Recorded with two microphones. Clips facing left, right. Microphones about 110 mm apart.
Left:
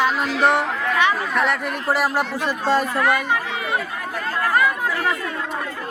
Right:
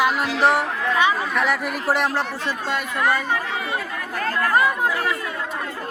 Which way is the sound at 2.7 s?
35° left (ahead or behind).